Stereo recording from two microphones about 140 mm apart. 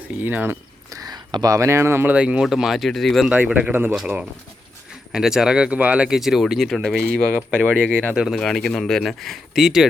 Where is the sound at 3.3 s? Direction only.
10° right (ahead or behind).